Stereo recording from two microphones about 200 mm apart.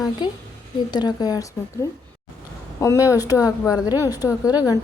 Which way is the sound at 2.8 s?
15° left (ahead or behind).